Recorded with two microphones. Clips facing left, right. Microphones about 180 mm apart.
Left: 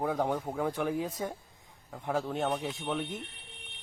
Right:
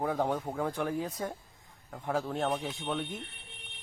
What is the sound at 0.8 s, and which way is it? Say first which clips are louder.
Speech: left 1 dB; 15° left (ahead or behind).